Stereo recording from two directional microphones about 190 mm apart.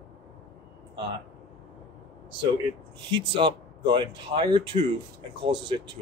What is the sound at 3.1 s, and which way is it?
Speech, 25° right (ahead or behind).